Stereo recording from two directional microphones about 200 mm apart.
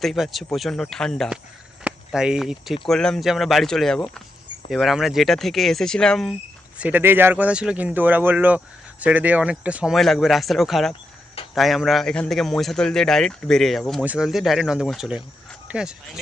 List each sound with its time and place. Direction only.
0.0 s speech: centre (ahead or behind)
6.7 s speech: 10° right (ahead or behind)